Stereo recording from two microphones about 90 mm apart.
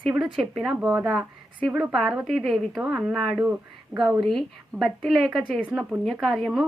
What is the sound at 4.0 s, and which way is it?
A woman's voice, centre (ahead or behind).